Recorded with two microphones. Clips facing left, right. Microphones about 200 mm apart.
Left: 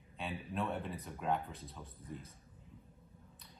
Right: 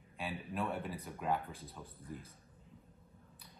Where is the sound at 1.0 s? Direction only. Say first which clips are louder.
Even; centre (ahead or behind).